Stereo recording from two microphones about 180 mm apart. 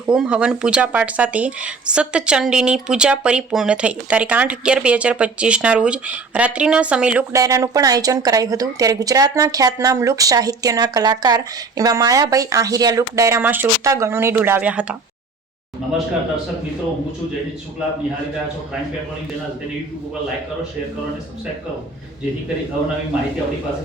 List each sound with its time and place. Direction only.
0.0 s speech: 5° right (ahead or behind)
7.3 s a woman's voice: 15° right (ahead or behind); by 16.0 s centre (ahead or behind)